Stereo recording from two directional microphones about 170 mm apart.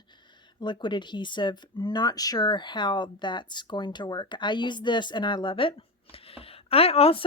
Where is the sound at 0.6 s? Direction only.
25° left (ahead or behind).